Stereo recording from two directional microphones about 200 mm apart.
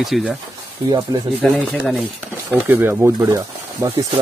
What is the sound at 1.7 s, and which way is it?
Speech, centre (ahead or behind).